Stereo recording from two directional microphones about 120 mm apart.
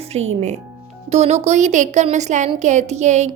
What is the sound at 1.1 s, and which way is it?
A woman's voice, 65° right (ahead or behind).